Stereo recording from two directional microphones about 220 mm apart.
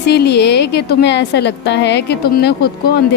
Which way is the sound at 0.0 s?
50° left (ahead or behind).